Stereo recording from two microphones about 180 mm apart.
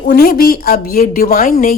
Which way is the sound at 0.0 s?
55° left (ahead or behind).